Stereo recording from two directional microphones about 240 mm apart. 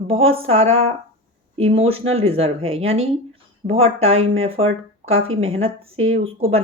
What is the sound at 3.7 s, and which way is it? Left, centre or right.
Speech, right.